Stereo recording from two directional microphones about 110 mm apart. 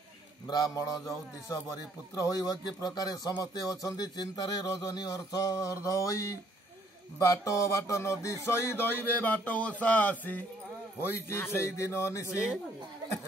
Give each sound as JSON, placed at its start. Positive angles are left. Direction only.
{"t": 0.5, "sound": "speech", "side_deg": 35}
{"t": 7.2, "sound": "music", "side_deg": 30}